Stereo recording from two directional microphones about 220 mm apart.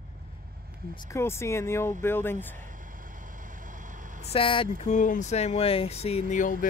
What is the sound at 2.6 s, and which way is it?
Vehicle, 35° right (ahead or behind).